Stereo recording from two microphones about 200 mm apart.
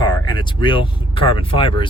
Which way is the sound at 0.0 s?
20° left (ahead or behind).